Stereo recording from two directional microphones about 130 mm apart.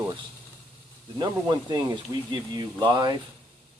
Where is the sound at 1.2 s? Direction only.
30° right (ahead or behind).